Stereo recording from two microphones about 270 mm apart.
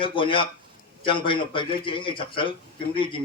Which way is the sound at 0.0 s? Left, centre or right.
Centre.